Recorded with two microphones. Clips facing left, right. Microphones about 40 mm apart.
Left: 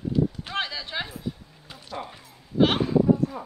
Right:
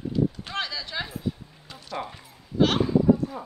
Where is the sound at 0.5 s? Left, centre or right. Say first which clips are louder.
Left 1 dB; centre.